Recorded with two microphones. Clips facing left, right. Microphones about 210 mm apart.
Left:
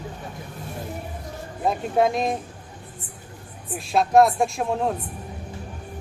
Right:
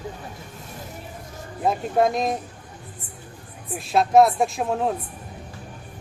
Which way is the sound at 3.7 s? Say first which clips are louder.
Right 1 dB; centre (ahead or behind).